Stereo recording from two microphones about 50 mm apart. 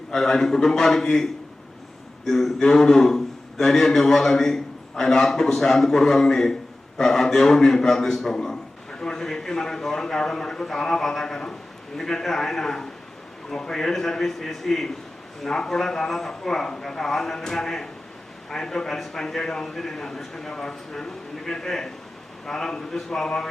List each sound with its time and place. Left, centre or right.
0.1 s a man's voice: centre